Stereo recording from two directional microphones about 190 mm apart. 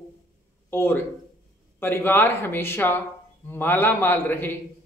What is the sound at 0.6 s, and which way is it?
Speech, 10° left (ahead or behind).